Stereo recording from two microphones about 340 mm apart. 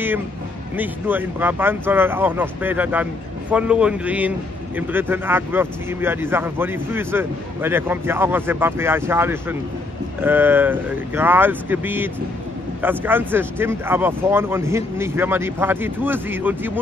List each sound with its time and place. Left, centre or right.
0.7 s speech: centre